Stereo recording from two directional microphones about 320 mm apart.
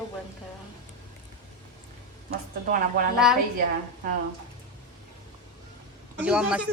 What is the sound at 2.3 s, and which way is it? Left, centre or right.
Speech, right.